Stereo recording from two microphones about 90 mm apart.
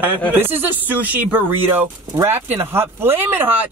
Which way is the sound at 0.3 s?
25° right (ahead or behind).